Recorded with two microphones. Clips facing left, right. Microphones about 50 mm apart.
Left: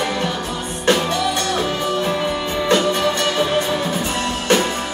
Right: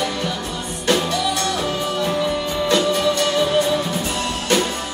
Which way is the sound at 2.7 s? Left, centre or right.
Left.